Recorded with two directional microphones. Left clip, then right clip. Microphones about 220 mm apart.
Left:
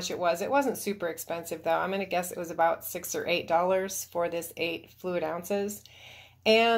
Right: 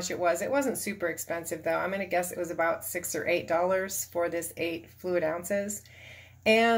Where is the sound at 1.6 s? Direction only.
40° left (ahead or behind).